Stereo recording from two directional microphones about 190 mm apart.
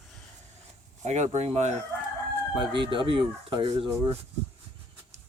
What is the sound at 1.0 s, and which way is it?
Speech, 35° right (ahead or behind).